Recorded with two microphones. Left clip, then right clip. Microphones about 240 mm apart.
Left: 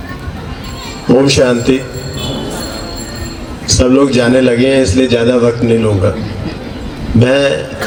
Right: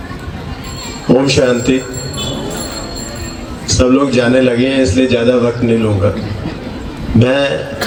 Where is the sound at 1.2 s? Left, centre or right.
Left.